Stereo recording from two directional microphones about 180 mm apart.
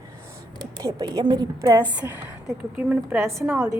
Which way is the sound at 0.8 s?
20° right (ahead or behind).